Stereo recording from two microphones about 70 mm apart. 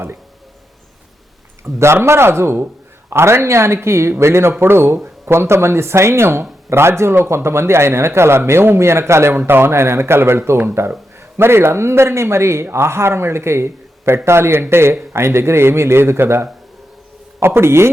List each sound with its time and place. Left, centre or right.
1.6 s a man's voice: right